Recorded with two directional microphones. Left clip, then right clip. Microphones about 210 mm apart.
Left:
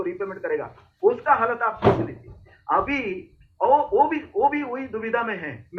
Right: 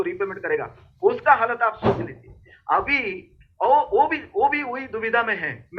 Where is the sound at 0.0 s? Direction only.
15° right (ahead or behind).